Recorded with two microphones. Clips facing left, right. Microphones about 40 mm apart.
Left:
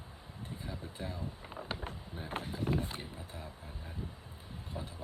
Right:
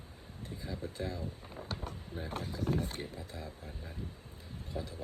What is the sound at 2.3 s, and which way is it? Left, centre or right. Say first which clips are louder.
Speech: left 1 dB; left.